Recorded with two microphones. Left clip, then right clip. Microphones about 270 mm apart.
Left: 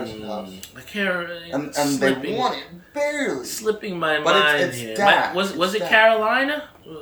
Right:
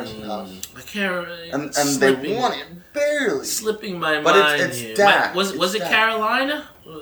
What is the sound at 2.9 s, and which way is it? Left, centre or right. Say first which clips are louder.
Speech: right 3 dB; centre.